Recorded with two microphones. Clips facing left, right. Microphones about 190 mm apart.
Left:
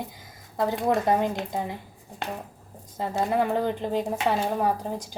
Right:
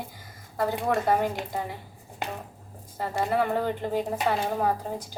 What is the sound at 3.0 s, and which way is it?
Speech, 20° left (ahead or behind).